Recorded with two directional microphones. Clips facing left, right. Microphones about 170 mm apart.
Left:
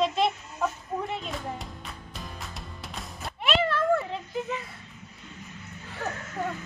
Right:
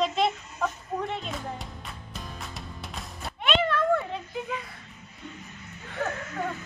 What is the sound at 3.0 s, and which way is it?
Music, centre (ahead or behind).